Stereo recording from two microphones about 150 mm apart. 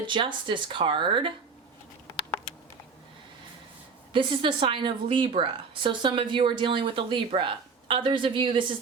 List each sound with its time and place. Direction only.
0.0 s a woman's voice: 35° right (ahead or behind)
4.1 s a woman's voice: 35° right (ahead or behind)